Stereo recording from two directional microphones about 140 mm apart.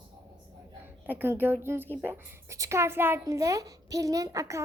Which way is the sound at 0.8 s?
15° right (ahead or behind).